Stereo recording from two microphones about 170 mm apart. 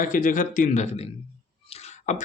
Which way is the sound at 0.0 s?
50° left (ahead or behind).